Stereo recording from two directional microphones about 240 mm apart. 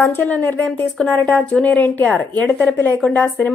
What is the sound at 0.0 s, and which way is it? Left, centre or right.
A woman's voice, centre.